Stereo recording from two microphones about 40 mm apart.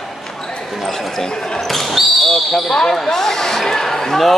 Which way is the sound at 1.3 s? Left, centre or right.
Centre.